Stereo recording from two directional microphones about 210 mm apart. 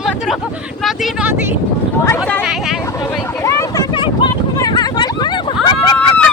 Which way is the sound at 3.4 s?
15° left (ahead or behind).